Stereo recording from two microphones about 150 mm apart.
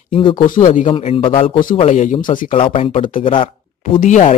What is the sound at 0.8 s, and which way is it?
Speech, 35° left (ahead or behind).